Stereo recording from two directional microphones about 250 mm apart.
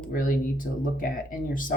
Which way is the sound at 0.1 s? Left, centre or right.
Left.